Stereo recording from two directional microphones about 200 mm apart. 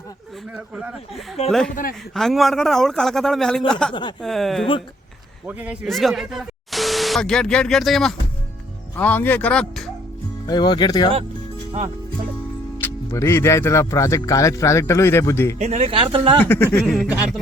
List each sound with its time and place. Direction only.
0.5 s a man's voice: 5° right (ahead or behind)
1.7 s a man's voice: 45° left (ahead or behind)
2.1 s a man's voice: centre (ahead or behind)
10.4 s speech: 20° left (ahead or behind)
12.8 s speech: 15° left (ahead or behind)
15.5 s speech: 35° right (ahead or behind)
16.4 s a man's voice: 10° left (ahead or behind)